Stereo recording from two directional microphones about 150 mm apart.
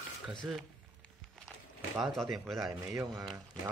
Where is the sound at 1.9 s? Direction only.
Centre (ahead or behind).